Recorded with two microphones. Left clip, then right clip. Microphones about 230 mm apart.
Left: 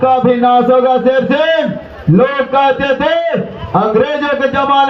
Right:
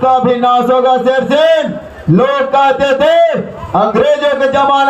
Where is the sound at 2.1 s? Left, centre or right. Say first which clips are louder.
Right 1 dB; right.